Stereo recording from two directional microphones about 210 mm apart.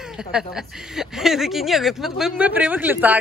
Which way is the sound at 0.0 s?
5° right (ahead or behind).